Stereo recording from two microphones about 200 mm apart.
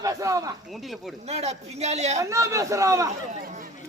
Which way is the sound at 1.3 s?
30° right (ahead or behind).